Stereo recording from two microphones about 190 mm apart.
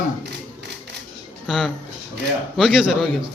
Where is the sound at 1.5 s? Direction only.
Centre (ahead or behind).